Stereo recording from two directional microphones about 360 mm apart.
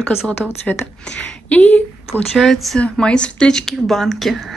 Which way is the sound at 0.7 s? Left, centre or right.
Centre.